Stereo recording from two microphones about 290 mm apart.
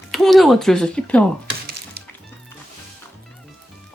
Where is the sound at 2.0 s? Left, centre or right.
Right.